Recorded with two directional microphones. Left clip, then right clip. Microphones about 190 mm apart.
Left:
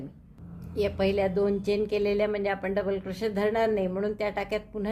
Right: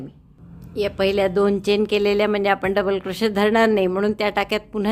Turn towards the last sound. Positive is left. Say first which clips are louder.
# right 8 dB
turn(degrees=-40)  # may be behind; listen again after turning